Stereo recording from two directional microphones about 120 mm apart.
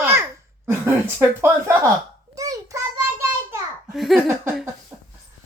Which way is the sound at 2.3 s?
30° right (ahead or behind).